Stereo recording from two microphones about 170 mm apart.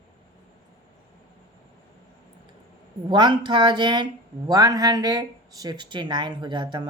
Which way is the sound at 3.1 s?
25° right (ahead or behind).